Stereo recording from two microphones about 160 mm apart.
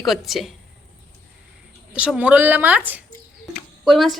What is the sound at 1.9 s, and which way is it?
A woman's voice, 5° right (ahead or behind).